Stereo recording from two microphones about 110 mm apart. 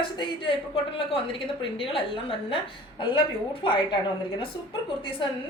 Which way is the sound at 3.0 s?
50° left (ahead or behind).